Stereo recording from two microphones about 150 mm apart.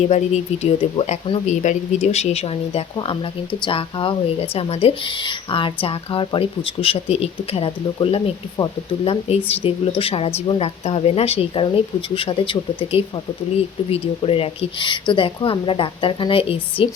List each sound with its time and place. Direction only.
0.0 s speech: 45° left (ahead or behind)